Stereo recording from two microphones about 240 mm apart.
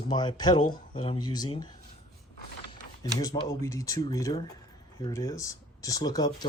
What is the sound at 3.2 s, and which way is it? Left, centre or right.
Speech, centre.